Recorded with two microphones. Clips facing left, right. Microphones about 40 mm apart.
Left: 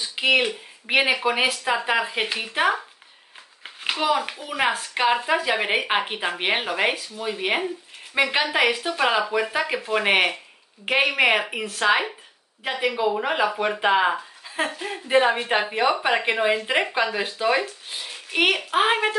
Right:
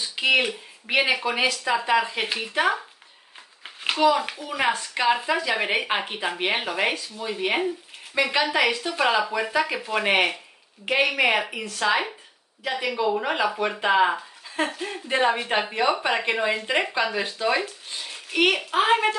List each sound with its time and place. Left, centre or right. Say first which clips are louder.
0.1 s speech: left 1 dB; centre
0.8 s speech: left 2 dB; left
3.6 s a sound: even; centre
4.0 s speech: right 3 dB; centre
9.3 s speech: left 3 dB; left
9.7 s speech: left 5 dB; centre
11.8 s speech: left 2 dB; left